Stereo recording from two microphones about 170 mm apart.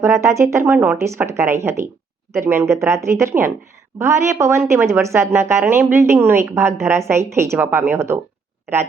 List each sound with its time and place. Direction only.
0.0 s a woman's voice: 15° right (ahead or behind)